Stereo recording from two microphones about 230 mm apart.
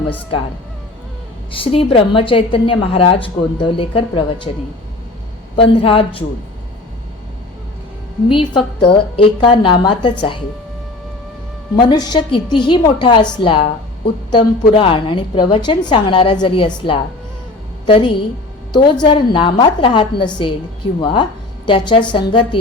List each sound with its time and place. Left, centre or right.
1.5 s a woman's voice: left
5.5 s a woman's voice: left
8.3 s a woman's voice: left
11.8 s a woman's voice: centre